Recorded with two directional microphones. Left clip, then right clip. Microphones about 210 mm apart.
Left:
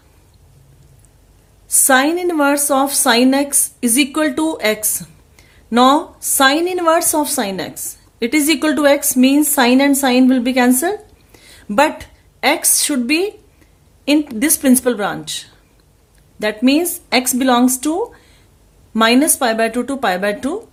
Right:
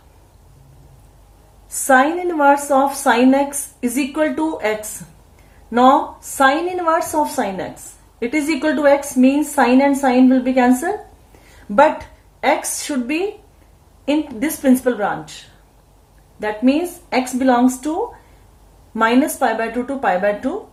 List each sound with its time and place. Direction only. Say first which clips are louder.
1.9 s a woman's voice: even; 65° left (ahead or behind)
5.7 s a woman's voice: even; 60° left (ahead or behind)
16.4 s a woman's voice: left 3 dB; 70° left (ahead or behind)
18.9 s a woman's voice: left 2 dB; 60° left (ahead or behind)